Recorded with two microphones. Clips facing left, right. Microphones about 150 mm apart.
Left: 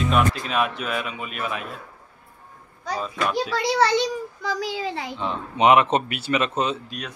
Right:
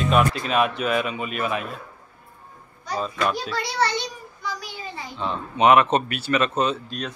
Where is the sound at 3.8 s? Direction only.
90° left.